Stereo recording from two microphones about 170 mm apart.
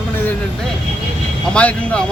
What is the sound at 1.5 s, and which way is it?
Speech, 5° left (ahead or behind).